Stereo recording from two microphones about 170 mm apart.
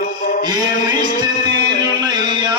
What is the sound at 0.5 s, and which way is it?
Music, 25° right (ahead or behind).